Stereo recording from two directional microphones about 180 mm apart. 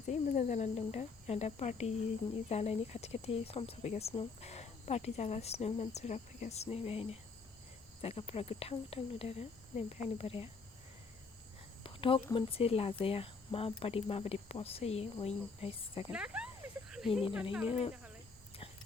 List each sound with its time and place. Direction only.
0.1 s speech: 40° left (ahead or behind)
11.8 s speech: 30° left (ahead or behind)
16.1 s speech: 5° right (ahead or behind)
16.9 s cricket: 5° right (ahead or behind)
17.7 s speech: 30° left (ahead or behind)